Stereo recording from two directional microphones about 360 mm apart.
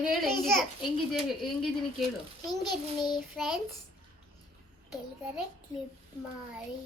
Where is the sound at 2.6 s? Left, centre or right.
Centre.